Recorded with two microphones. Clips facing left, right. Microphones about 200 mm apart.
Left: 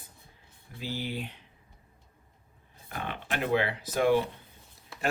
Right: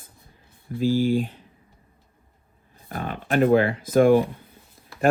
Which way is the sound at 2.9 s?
45° right (ahead or behind).